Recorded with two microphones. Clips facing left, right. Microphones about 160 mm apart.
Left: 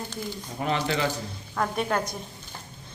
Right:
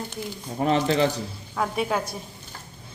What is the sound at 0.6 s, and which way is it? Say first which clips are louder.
Speech: right 5 dB; 35° right (ahead or behind).